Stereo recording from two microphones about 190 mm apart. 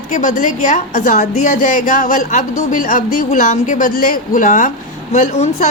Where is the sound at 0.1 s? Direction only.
40° left (ahead or behind).